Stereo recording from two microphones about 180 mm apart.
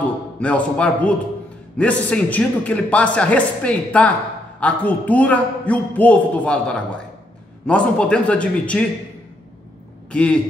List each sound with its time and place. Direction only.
0.4 s a man's voice: 5° left (ahead or behind)
10.1 s speech: 5° left (ahead or behind)